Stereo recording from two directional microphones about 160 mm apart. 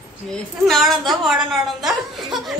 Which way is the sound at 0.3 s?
Centre (ahead or behind).